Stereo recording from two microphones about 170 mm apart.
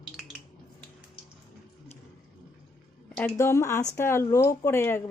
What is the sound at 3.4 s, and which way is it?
Speech, 15° left (ahead or behind).